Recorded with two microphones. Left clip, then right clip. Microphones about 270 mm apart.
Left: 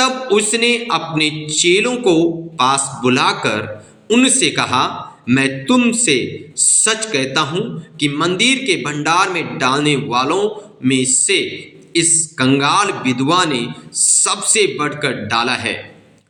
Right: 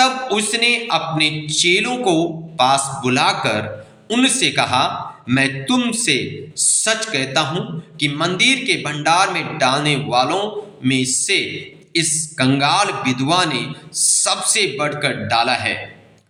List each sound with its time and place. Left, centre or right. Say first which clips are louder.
0.0 s speech: left 1 dB; centre